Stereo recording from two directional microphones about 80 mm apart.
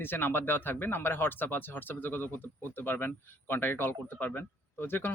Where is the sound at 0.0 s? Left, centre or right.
Left.